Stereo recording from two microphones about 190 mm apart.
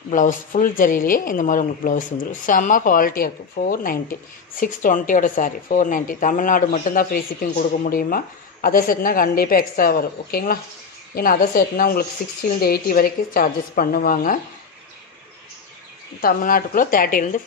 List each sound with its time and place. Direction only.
0.1 s speech: 45° left (ahead or behind)
16.2 s speech: 50° left (ahead or behind)